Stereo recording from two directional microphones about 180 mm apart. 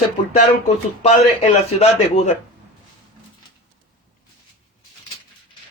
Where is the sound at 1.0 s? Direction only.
35° left (ahead or behind).